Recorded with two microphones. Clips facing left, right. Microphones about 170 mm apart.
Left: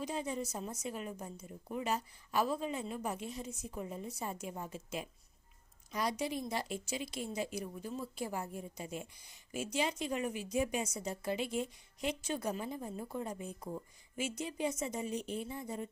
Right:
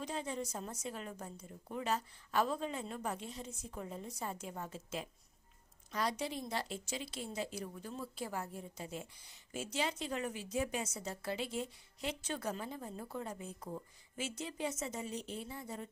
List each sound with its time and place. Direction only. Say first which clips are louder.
0.0 s a woman's voice: left 2 dB; 10° left (ahead or behind)